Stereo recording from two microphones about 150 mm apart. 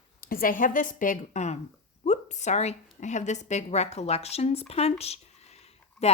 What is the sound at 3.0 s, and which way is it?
Speech, 50° left (ahead or behind).